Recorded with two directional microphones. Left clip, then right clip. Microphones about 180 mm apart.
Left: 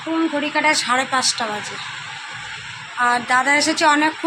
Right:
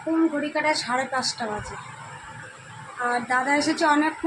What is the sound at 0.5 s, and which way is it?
Speech, 20° left (ahead or behind).